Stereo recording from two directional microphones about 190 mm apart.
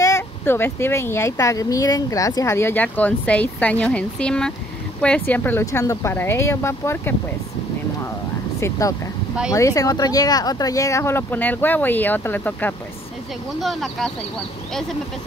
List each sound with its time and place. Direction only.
0.0 s speech: 15° left (ahead or behind)
8.5 s speech: 15° left (ahead or behind); by 14.1 s centre (ahead or behind)